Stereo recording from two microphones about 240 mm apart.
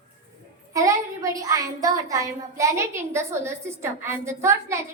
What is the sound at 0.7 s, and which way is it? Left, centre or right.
A woman's voice, centre.